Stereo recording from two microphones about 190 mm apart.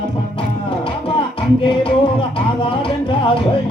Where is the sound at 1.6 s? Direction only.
25° left (ahead or behind).